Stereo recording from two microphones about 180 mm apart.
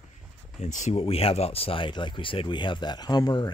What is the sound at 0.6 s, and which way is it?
Speech, 40° left (ahead or behind).